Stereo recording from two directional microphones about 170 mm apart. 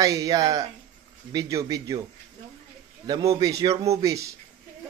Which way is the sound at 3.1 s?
20° right (ahead or behind).